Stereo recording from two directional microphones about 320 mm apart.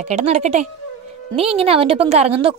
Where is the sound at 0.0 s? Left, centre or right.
Centre.